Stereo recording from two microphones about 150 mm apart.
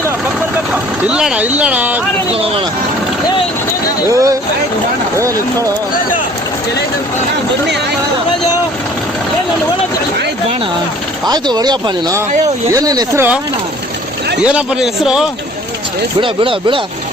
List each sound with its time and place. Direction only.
0.7 s speech: 5° right (ahead or behind)
2.3 s speech: 40° right (ahead or behind)
4.1 s speech: 20° right (ahead or behind)
11.3 s speech: 25° right (ahead or behind)
14.4 s a man's voice: 5° right (ahead or behind)
16.2 s speech: 35° right (ahead or behind)